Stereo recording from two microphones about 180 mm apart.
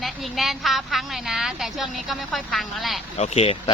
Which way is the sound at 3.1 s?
35° left (ahead or behind).